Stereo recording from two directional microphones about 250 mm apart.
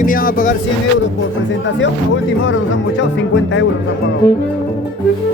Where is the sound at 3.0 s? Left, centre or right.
Left.